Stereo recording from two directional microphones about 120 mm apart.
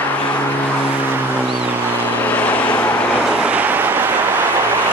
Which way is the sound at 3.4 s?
15° right (ahead or behind).